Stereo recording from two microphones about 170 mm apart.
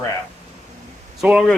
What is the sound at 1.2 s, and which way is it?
Speech, centre (ahead or behind).